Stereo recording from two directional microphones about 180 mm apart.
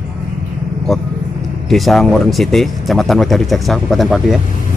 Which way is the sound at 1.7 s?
Centre (ahead or behind).